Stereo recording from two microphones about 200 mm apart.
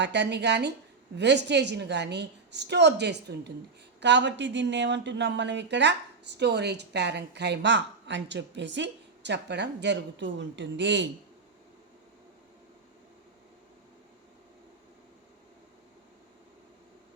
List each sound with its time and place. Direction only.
0.0 s a woman's voice: 60° right (ahead or behind)